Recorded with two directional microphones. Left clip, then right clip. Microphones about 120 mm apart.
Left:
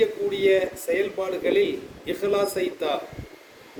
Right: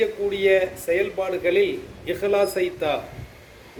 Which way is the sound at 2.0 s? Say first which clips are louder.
Right 3 dB; 50° left (ahead or behind).